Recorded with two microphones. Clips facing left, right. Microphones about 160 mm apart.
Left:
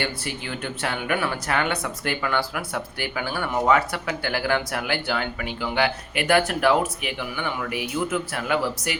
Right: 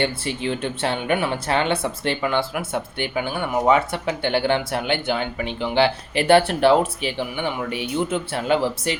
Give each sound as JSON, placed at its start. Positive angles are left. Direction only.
{"t": 0.0, "sound": "speech", "side_deg": -25}